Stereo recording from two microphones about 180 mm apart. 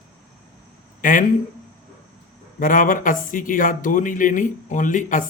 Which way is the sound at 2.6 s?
50° left (ahead or behind).